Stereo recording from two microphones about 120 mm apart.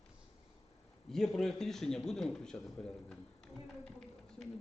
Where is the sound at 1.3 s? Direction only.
5° left (ahead or behind).